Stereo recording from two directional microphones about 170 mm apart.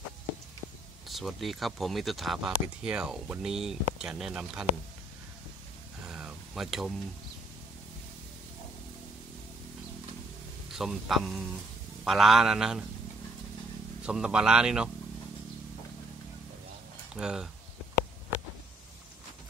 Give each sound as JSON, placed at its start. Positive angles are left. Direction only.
{"t": 1.0, "sound": "speech", "side_deg": 0}
{"t": 6.0, "sound": "a sound", "side_deg": -5}
{"t": 10.7, "sound": "speech", "side_deg": 0}
{"t": 14.0, "sound": "speech", "side_deg": -5}
{"t": 17.1, "sound": "speech", "side_deg": -5}